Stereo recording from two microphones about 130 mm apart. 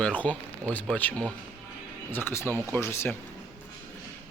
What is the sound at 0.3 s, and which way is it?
Speech, 10° left (ahead or behind).